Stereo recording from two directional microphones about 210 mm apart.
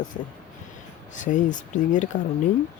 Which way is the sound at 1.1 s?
35° left (ahead or behind).